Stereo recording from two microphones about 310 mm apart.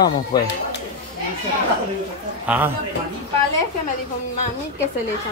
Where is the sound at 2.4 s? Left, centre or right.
Centre.